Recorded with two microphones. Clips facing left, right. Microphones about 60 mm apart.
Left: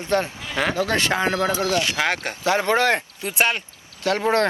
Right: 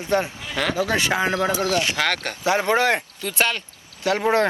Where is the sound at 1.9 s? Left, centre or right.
Centre.